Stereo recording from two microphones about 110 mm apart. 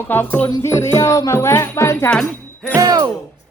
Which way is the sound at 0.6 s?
25° left (ahead or behind).